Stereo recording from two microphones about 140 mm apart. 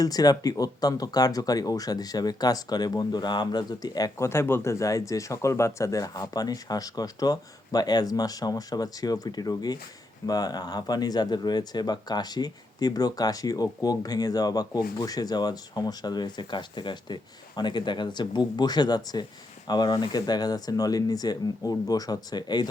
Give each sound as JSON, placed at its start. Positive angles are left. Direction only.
{"t": 0.0, "sound": "speech", "side_deg": 25}